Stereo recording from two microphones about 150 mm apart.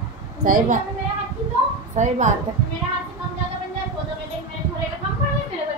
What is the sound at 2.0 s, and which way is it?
Speech, 55° right (ahead or behind).